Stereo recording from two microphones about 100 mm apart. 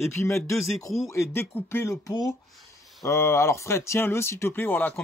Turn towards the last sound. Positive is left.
turn(degrees=20)  # may be behind; listen again after turning